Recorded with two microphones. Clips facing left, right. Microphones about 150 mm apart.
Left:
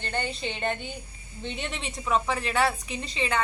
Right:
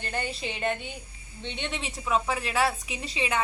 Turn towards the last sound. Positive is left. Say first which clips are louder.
# left 1 dB
turn(degrees=-5)  # may be behind; listen again after turning